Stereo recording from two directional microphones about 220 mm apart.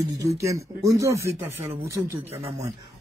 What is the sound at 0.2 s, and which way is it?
Speech, 15° right (ahead or behind).